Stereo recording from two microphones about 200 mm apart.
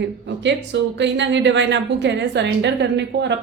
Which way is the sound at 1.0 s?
65° right (ahead or behind).